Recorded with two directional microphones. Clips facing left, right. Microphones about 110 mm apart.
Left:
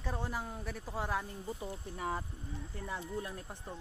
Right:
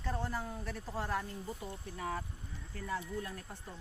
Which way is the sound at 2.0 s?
25° left (ahead or behind).